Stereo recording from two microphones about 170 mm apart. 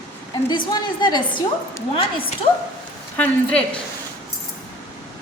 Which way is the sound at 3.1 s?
10° left (ahead or behind).